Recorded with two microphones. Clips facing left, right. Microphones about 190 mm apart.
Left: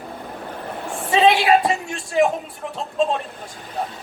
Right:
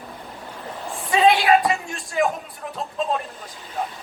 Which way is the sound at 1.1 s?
25° left (ahead or behind).